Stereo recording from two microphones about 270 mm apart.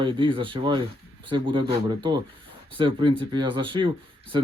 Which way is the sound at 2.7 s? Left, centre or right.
Centre.